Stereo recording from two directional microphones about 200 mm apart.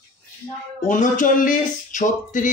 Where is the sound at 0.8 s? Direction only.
40° left (ahead or behind).